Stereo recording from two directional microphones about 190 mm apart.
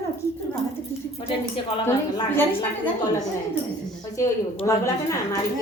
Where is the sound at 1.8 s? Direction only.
15° left (ahead or behind).